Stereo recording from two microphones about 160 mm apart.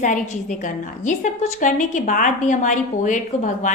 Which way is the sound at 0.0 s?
50° left (ahead or behind).